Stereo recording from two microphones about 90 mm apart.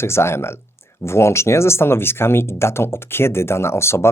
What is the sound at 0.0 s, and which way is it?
Speech, 30° left (ahead or behind).